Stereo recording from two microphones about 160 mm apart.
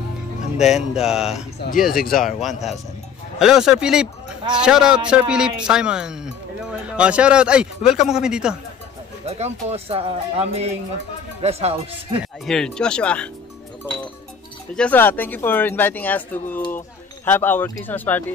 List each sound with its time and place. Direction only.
0.6 s speech: centre (ahead or behind)
9.2 s speech: 40° right (ahead or behind)
12.4 s speech: 5° left (ahead or behind)
14.8 s speech: 10° left (ahead or behind)